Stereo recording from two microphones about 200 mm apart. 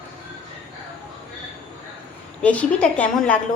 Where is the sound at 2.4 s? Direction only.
5° left (ahead or behind).